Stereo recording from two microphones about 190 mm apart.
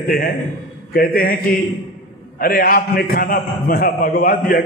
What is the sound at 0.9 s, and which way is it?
A man's voice, 50° left (ahead or behind).